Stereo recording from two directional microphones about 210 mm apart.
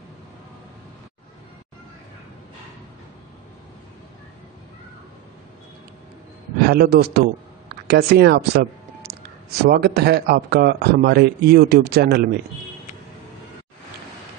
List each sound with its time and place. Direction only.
6.6 s a man's voice: 50° right (ahead or behind)